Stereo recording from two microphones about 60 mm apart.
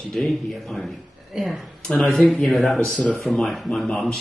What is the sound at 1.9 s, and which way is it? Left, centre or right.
Speech, centre.